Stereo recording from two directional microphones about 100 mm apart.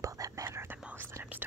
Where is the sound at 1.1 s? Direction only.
30° right (ahead or behind).